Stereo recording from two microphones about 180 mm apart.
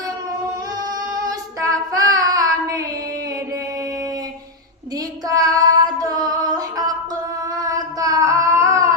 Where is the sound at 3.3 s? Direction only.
20° right (ahead or behind).